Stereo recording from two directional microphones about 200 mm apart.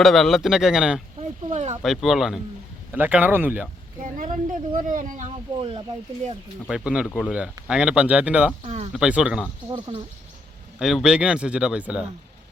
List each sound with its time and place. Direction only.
0.0 s speech: centre (ahead or behind)
1.5 s speech: 35° right (ahead or behind)
1.8 s speech: centre (ahead or behind)
4.0 s speech: 40° right (ahead or behind)
6.7 s speech: 5° right (ahead or behind)
8.6 s speech: 30° right (ahead or behind)
9.0 s speech: 5° right (ahead or behind)
9.6 s speech: 25° right (ahead or behind)
10.8 s speech: 5° right (ahead or behind)